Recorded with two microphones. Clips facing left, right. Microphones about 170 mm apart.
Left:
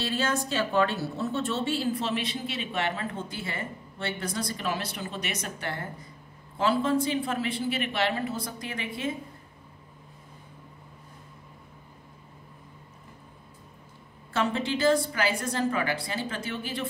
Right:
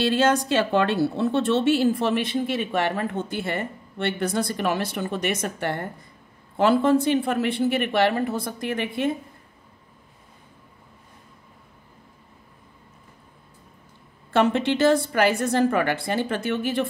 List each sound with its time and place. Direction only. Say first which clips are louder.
0.0 s speech: right 8 dB; 85° right
1.1 s speech: right 8 dB; 90° right; by 9.1 s 65° right (ahead or behind)
14.3 s a woman's voice: right 7 dB; 70° right (ahead or behind)